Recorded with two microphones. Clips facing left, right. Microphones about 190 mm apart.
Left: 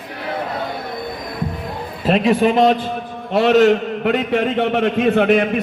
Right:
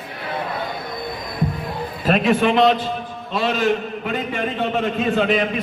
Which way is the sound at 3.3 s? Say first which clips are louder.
Left 8 dB; 65° left (ahead or behind).